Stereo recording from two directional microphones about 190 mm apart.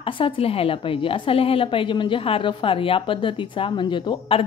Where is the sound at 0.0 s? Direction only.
30° left (ahead or behind).